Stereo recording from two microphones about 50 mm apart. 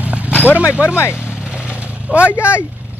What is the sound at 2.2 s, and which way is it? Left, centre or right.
Speech, left.